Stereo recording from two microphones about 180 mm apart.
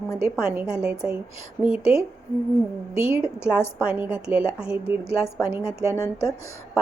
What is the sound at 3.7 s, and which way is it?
A woman's voice, 5° right (ahead or behind).